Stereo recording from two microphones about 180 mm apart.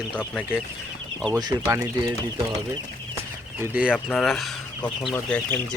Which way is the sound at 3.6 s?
10° right (ahead or behind).